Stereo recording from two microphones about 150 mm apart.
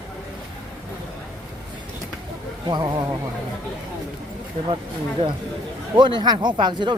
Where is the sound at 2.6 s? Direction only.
25° right (ahead or behind).